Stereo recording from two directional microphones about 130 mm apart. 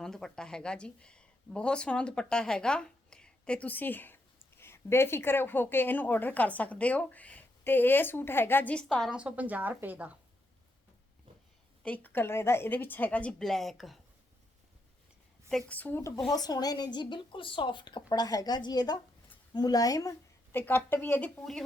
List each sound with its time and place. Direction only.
0.0 s speech: 5° left (ahead or behind)
9.0 s a woman's voice: 10° right (ahead or behind)
11.8 s speech: 10° left (ahead or behind)
15.4 s a woman's voice: 5° left (ahead or behind)
15.8 s speech: 20° left (ahead or behind)
16.3 s a woman's voice: 30° left (ahead or behind); by 21.6 s 5° left (ahead or behind)